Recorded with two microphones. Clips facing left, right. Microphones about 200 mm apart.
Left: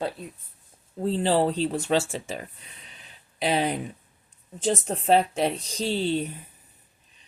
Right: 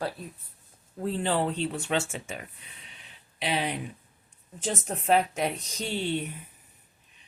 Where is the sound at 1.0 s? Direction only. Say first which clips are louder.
Left 5 dB; 30° left (ahead or behind).